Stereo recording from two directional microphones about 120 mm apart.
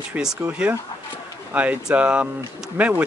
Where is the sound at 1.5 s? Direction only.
10° right (ahead or behind).